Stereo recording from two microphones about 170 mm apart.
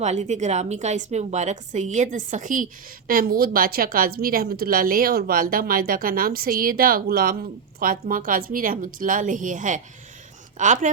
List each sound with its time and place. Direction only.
0.0 s a woman's voice: 40° right (ahead or behind)
3.1 s a woman's voice: 60° right (ahead or behind)